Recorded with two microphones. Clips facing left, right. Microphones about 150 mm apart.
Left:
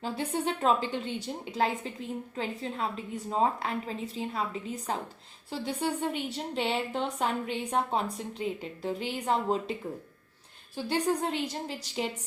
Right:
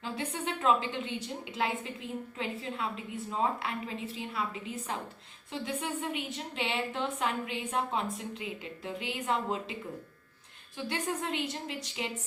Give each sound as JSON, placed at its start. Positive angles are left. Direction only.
{"t": 0.0, "sound": "speech", "side_deg": 35}
{"t": 10.8, "sound": "speech", "side_deg": 35}